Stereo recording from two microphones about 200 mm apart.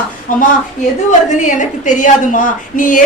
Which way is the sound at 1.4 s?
40° left (ahead or behind).